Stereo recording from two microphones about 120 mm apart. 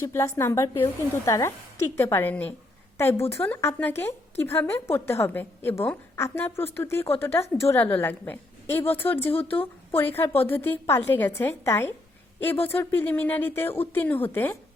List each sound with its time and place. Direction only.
0.0 s a woman's voice: 25° left (ahead or behind)